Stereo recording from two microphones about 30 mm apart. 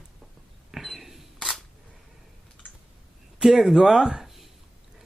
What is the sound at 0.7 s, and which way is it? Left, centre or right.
Single-lens reflex camera, centre.